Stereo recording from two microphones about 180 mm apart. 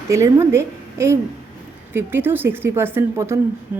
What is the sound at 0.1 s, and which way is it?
A woman's voice, 15° right (ahead or behind).